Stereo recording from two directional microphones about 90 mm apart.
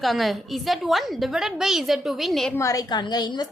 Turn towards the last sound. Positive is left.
turn(degrees=50)  # may be behind; listen again after turning